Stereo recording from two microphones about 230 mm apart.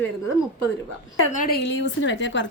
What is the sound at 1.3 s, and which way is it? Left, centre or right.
A woman's voice, left.